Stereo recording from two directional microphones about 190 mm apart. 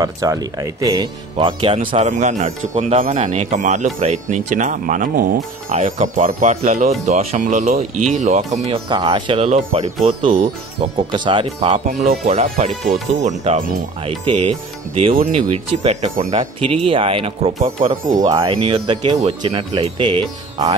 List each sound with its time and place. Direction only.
0.0 s speech: 20° right (ahead or behind)
2.0 s speech: 40° right (ahead or behind)
5.7 s speech: 40° right (ahead or behind)
8.8 s speech: 25° right (ahead or behind); by 10.5 s 40° right (ahead or behind)
10.8 s speech: 25° right (ahead or behind)
12.8 s speech: centre (ahead or behind)
13.2 s speech: 35° right (ahead or behind)
15.1 s speech: 45° right (ahead or behind)
15.5 s speech: 35° right (ahead or behind)